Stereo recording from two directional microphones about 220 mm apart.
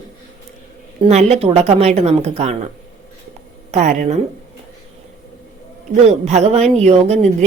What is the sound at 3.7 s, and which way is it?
Speech, 35° right (ahead or behind).